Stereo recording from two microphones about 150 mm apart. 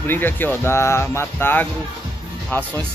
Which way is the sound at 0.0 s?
15° left (ahead or behind).